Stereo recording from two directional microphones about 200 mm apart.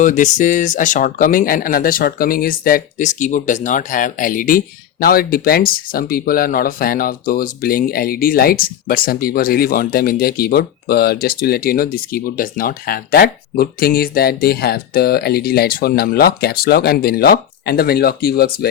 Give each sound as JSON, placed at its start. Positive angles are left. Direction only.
{"t": 0.0, "sound": "speech", "side_deg": 40}